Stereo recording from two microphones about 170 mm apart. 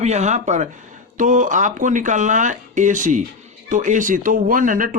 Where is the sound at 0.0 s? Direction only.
40° right (ahead or behind).